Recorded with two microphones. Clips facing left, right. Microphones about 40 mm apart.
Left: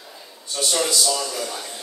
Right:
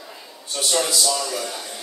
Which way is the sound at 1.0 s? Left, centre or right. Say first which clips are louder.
Even; centre.